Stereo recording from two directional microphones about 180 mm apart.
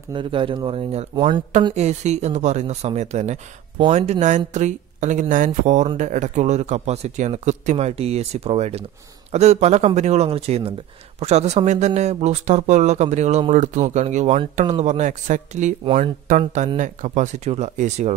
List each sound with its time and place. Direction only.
0.1 s speech: 30° right (ahead or behind)